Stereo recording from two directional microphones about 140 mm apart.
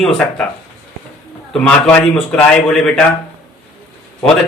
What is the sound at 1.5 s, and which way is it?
A man's voice, 5° left (ahead or behind).